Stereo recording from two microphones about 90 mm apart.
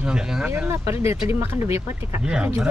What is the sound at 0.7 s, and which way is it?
Speech, 30° right (ahead or behind).